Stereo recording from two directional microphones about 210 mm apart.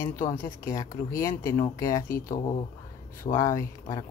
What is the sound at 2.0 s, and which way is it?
Speech, 40° left (ahead or behind).